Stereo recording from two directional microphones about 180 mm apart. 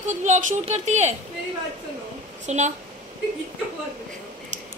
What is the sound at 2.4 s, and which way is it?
Speech, 40° right (ahead or behind).